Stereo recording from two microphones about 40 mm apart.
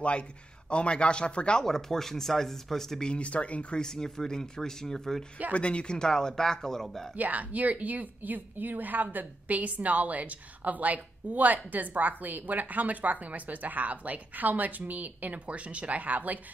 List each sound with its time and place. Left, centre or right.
0.7 s speech: left
1.6 s speech: centre
3.1 s speech: left
3.8 s speech: centre
5.5 s speech: left
5.9 s speech: centre
7.2 s a woman's voice: right